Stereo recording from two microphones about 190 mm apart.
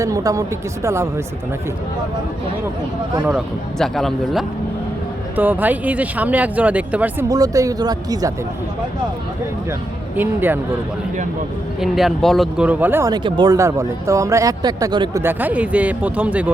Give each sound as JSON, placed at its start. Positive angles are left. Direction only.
{"t": 0.0, "sound": "speech", "side_deg": -15}
{"t": 3.2, "sound": "a man's voice", "side_deg": 0}
{"t": 10.2, "sound": "speech", "side_deg": -10}
{"t": 11.8, "sound": "speech", "side_deg": 0}
{"t": 15.2, "sound": "speech", "side_deg": -10}